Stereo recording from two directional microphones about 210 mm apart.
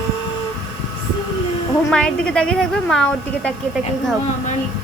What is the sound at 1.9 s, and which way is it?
A woman's voice, 5° left (ahead or behind).